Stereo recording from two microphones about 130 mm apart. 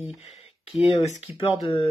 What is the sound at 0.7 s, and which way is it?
Speech, 45° left (ahead or behind).